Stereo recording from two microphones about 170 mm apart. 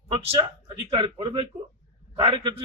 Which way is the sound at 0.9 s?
30° right (ahead or behind).